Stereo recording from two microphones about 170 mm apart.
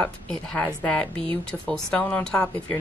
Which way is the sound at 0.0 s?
5° left (ahead or behind).